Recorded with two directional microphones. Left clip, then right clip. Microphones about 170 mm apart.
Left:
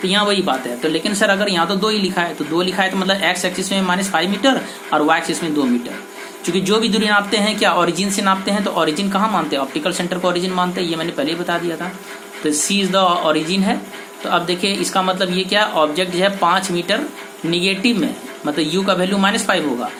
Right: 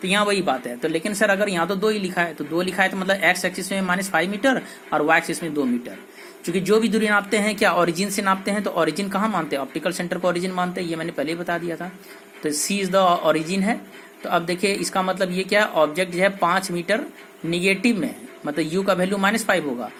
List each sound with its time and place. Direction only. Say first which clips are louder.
0.0 s speech: left 4 dB; 35° right (ahead or behind)
18.4 s speech: left 4 dB; 35° right (ahead or behind)